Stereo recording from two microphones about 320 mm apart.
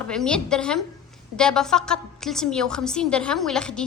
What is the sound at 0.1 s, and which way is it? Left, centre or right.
A woman's voice, centre.